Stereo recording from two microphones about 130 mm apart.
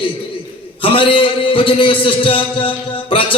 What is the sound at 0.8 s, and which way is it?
A man's voice, 40° left (ahead or behind).